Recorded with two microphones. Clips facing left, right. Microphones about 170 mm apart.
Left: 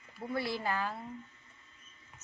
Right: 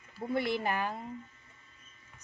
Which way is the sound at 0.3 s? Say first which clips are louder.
Right 3 dB; 20° right (ahead or behind).